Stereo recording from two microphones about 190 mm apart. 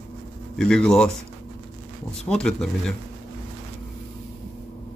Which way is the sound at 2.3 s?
5° left (ahead or behind).